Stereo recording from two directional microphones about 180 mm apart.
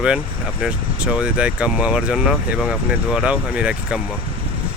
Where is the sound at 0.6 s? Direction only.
5° right (ahead or behind).